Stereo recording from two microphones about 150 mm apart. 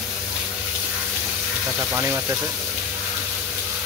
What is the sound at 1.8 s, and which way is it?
Speech, 15° right (ahead or behind).